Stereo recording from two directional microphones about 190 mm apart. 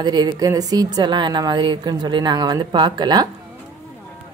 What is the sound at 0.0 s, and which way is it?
A woman's voice, 20° right (ahead or behind).